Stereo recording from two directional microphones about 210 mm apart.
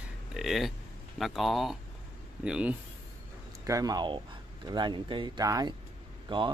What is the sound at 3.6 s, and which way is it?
Speech, 15° right (ahead or behind).